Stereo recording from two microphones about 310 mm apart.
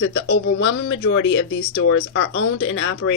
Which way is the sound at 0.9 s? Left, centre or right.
Left.